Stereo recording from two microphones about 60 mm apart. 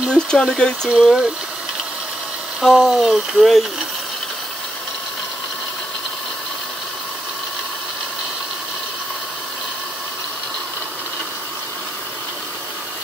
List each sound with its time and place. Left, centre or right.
0.1 s speech: centre
0.8 s speech: centre
2.6 s speech: centre